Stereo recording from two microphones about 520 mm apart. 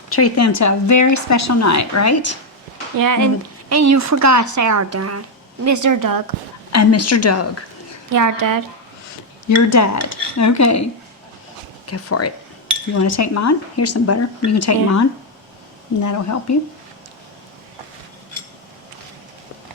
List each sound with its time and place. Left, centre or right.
0.1 s speech: left
3.0 s speech: right
6.7 s a woman's voice: left
8.1 s speech: right
9.6 s speech: left
11.9 s a woman's voice: left
16.0 s speech: left